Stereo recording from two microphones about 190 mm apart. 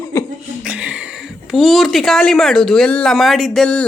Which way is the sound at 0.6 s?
5° right (ahead or behind).